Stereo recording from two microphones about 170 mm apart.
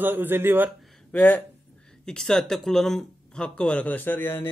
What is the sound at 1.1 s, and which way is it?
Speech, 10° left (ahead or behind).